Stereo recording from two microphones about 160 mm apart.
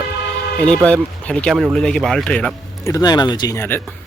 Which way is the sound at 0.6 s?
5° left (ahead or behind).